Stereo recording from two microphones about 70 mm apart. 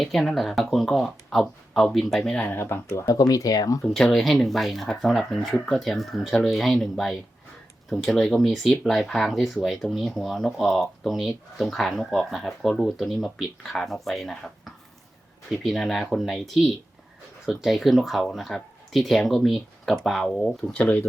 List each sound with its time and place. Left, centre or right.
0.0 s speech: centre
2.5 s speech: left
3.1 s speech: left
3.9 s speech: centre
20.2 s speech: centre